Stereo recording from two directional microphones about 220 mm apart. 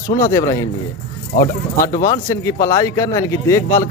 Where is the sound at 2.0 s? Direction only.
15° left (ahead or behind).